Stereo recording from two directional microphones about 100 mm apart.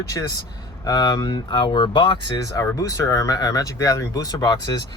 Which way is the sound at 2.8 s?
30° left (ahead or behind).